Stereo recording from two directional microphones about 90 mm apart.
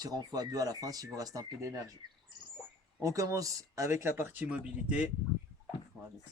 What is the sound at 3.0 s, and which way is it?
Speech, 35° right (ahead or behind).